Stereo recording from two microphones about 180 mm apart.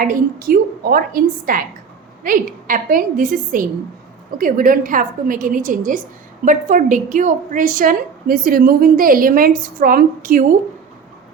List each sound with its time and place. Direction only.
0.0 s a woman's voice: 50° right (ahead or behind)